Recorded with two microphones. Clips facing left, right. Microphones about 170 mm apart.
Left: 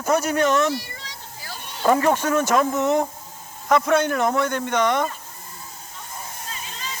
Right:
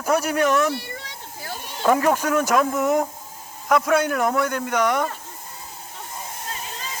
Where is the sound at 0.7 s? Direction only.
60° right (ahead or behind).